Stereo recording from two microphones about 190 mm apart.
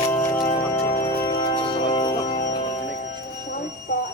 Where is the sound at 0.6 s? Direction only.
15° left (ahead or behind).